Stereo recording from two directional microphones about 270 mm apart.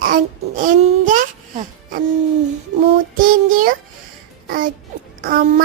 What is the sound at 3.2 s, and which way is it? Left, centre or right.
Speech, right.